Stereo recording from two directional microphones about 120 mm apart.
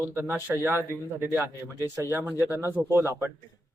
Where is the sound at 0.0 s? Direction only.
20° right (ahead or behind).